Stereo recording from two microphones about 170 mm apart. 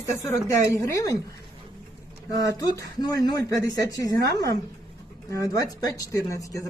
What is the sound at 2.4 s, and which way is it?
Speech, 20° left (ahead or behind).